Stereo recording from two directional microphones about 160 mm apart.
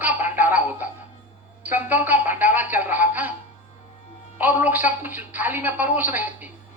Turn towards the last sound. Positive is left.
turn(degrees=-10)  # may be behind; listen again after turning